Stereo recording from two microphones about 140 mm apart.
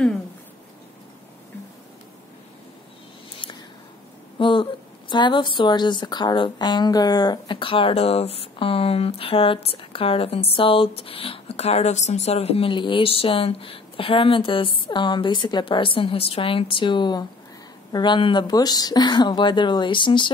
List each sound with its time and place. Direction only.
4.4 s a woman's voice: 35° left (ahead or behind)